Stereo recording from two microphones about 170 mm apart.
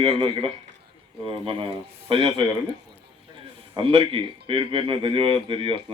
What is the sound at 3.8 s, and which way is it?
Speech, 30° right (ahead or behind).